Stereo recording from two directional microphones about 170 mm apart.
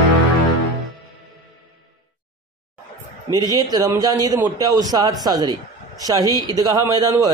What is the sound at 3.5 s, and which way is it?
A man's voice, 25° right (ahead or behind).